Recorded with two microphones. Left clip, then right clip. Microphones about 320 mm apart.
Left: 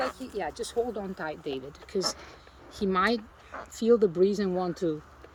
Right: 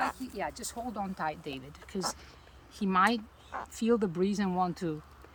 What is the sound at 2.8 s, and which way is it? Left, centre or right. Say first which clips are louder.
Speech: left 1 dB; centre.